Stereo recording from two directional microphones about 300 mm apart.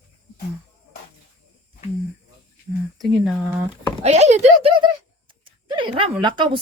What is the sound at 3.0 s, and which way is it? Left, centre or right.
Speech, centre.